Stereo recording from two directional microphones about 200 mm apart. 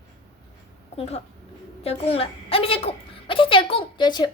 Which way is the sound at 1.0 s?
30° left (ahead or behind).